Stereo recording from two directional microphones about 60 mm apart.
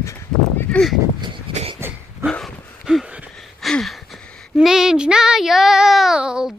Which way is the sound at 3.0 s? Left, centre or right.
Right.